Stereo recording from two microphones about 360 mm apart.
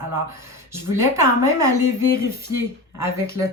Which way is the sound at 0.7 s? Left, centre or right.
Centre.